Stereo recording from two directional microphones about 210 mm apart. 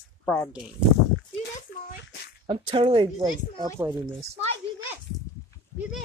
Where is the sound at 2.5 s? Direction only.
25° right (ahead or behind).